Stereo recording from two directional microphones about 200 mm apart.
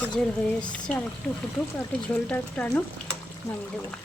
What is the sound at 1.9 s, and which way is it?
Speech, 5° left (ahead or behind).